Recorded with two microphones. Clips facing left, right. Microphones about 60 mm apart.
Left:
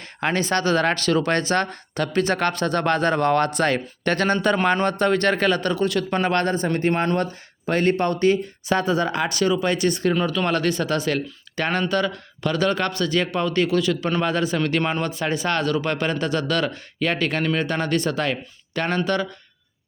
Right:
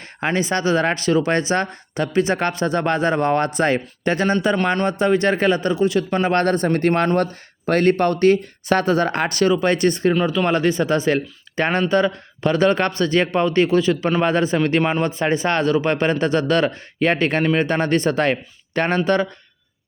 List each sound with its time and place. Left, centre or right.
0.3 s speech: centre
6.3 s a man's voice: right
10.3 s a man's voice: centre; by 19.3 s right